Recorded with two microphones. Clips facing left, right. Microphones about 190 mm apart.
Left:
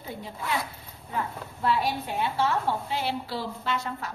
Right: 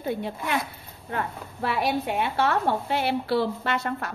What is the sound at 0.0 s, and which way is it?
A woman's voice, 65° right (ahead or behind).